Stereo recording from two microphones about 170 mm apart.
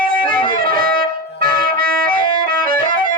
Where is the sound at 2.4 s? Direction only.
55° right (ahead or behind).